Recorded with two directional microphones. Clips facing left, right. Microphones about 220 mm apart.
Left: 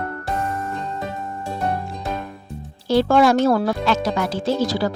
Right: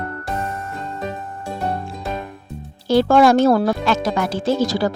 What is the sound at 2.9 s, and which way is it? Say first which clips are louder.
Speech: right 2 dB; 45° right (ahead or behind).